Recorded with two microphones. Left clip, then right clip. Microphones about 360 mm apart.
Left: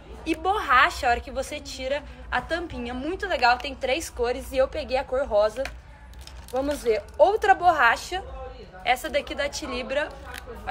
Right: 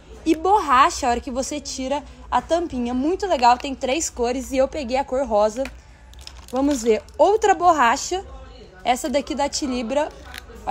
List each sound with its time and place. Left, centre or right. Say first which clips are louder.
0.2 s a woman's voice: right 7 dB; centre
6.6 s a woman's voice: right 5 dB; centre